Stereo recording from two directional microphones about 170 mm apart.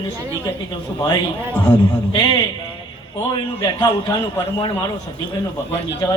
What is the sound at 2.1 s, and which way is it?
A man's voice, 25° left (ahead or behind).